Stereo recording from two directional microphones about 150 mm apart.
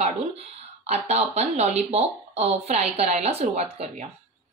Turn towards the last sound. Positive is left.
turn(degrees=-45)  # may be behind; listen again after turning